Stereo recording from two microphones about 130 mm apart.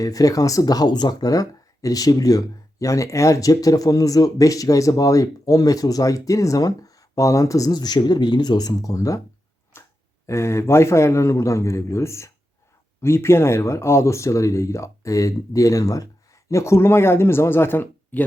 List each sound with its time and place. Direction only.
0.0 s speech: 25° left (ahead or behind)
9.7 s a sound: 20° left (ahead or behind)
10.2 s speech: 20° left (ahead or behind)